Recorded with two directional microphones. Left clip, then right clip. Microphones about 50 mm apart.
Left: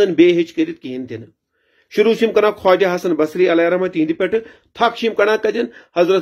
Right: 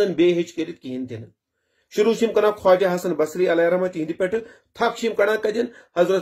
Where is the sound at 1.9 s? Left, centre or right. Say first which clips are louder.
Left 5 dB; right.